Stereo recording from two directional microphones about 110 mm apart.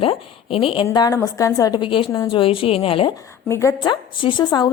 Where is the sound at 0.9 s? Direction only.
35° left (ahead or behind).